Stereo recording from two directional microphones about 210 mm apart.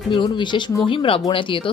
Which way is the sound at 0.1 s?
20° left (ahead or behind).